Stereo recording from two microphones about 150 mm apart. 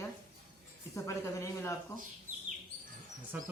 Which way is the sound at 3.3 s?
10° right (ahead or behind).